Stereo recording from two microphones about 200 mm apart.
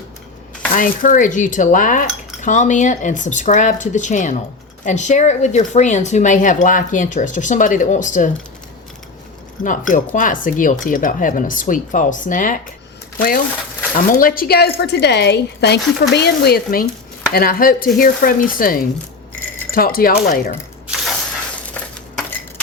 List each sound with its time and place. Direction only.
0.7 s speech: 40° left (ahead or behind)
9.6 s speech: 40° left (ahead or behind)